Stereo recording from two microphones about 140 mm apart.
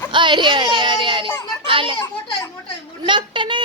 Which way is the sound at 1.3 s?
25° left (ahead or behind).